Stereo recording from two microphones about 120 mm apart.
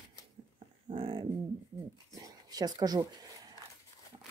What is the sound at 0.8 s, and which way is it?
Speech, 45° right (ahead or behind).